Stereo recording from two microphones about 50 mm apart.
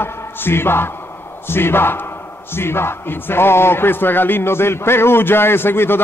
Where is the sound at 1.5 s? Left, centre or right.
Left.